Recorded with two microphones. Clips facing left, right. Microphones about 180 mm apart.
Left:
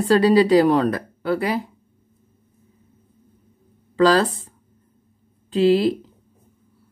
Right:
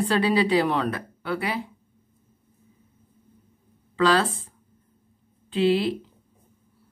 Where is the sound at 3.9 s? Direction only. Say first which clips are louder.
Left 5 dB; 40° left (ahead or behind).